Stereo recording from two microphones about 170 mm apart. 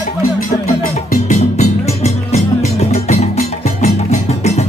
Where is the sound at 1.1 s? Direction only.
45° left (ahead or behind).